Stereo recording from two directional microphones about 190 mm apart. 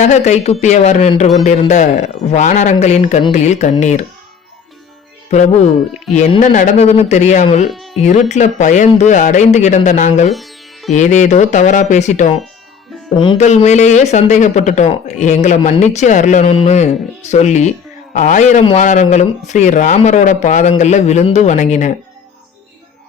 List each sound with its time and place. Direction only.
0.0 s speech: 40° left (ahead or behind)
5.3 s speech: 40° left (ahead or behind)
7.7 s music: centre (ahead or behind)
7.9 s speech: 40° left (ahead or behind)
10.3 s music: centre (ahead or behind)
10.9 s speech: 40° left (ahead or behind)
13.4 s speech: 35° left (ahead or behind)